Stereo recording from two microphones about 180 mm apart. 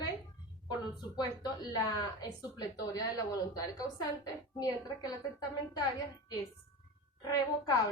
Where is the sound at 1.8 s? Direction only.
20° left (ahead or behind).